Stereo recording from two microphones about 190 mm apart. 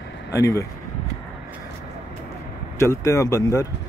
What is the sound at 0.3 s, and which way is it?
Speech, 15° left (ahead or behind).